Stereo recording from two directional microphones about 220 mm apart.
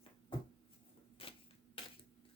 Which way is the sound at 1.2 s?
25° left (ahead or behind).